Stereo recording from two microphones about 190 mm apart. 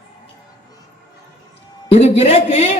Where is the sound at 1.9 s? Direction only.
35° left (ahead or behind).